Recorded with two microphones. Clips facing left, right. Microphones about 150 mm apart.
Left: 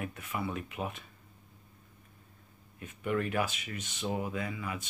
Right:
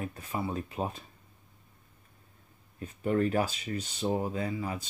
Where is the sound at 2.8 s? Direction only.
35° right (ahead or behind).